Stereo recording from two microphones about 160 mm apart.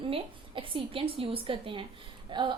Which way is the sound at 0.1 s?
35° right (ahead or behind).